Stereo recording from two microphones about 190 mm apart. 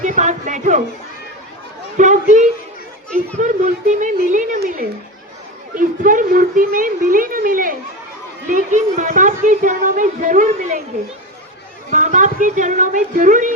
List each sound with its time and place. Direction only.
0.0 s speech: 40° right (ahead or behind)
2.0 s speech: 40° right (ahead or behind)
3.3 s a child's voice: 40° right (ahead or behind)
11.9 s speech: 40° right (ahead or behind)